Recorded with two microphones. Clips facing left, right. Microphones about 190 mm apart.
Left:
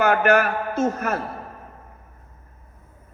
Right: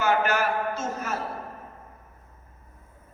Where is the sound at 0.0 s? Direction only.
60° left (ahead or behind).